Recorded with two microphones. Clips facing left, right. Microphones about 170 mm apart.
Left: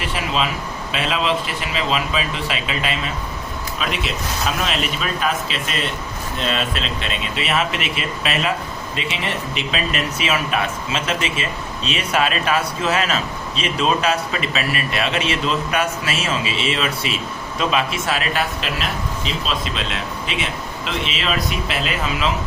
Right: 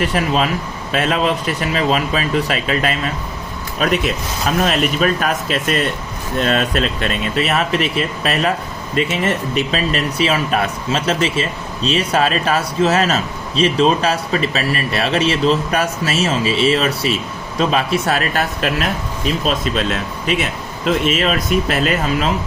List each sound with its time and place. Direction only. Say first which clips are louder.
0.0 s speech: right 5 dB; 45° right (ahead or behind)